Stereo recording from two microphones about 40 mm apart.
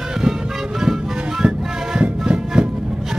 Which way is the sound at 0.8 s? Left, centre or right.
Centre.